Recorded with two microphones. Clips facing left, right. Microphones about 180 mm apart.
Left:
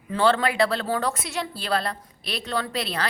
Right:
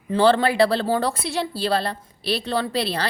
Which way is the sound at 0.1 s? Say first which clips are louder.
Right 4 dB; 30° right (ahead or behind).